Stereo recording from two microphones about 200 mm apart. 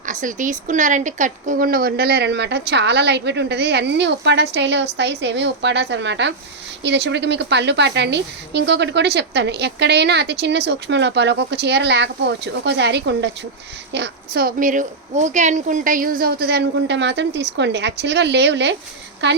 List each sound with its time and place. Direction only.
0.0 s a woman's voice: 40° right (ahead or behind); by 19.4 s 60° right (ahead or behind)